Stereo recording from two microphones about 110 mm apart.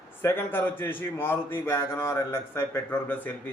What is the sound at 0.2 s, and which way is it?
A man's voice, 20° left (ahead or behind).